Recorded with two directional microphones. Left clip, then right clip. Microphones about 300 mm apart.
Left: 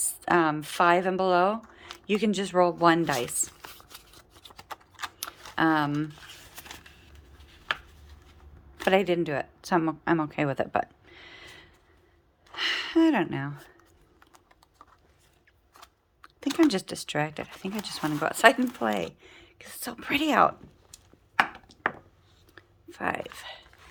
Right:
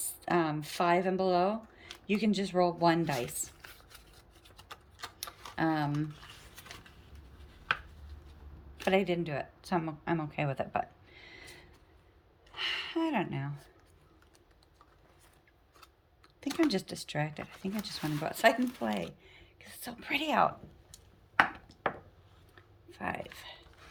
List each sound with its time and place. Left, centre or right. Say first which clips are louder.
0.0 s speech: left 7 dB; centre
3.7 s shuffling cards: left 6 dB; left
5.2 s a sound: left 7 dB; centre
8.8 s a woman's voice: left 6 dB; centre
16.4 s speech: left 7 dB; centre
22.5 s a sound: left 7 dB; centre